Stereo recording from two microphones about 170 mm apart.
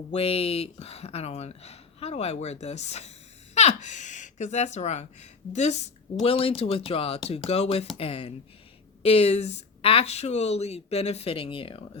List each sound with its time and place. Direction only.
0.1 s speech: 35° left (ahead or behind)